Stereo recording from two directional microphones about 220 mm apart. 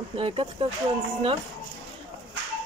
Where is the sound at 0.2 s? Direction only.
25° right (ahead or behind).